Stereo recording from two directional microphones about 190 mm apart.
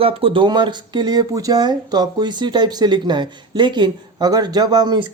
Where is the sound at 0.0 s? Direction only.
30° right (ahead or behind).